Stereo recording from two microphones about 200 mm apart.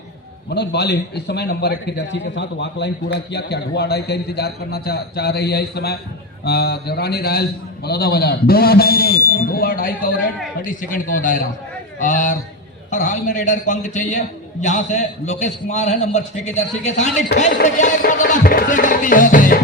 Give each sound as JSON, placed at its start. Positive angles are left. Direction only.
{"t": 0.5, "sound": "a man's voice", "side_deg": 55}